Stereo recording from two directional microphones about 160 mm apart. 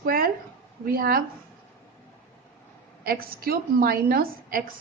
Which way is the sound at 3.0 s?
70° right (ahead or behind).